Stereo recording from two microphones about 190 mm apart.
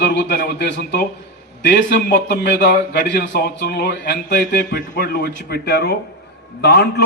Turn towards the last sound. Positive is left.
turn(degrees=60)  # may be behind; listen again after turning